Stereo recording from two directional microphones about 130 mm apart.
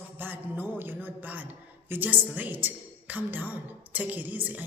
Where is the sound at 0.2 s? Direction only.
15° right (ahead or behind).